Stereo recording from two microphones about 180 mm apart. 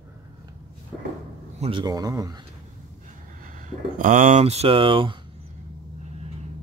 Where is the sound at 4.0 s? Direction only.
45° right (ahead or behind); by 5.1 s 30° right (ahead or behind).